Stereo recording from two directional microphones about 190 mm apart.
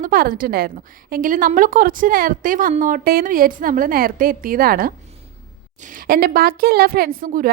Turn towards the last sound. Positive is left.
turn(degrees=-45)  # may be behind; listen again after turning